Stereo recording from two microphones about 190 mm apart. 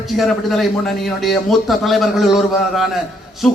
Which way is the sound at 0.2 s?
Centre (ahead or behind).